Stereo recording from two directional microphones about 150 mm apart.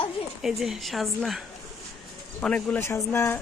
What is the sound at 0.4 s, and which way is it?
A woman's voice, centre (ahead or behind).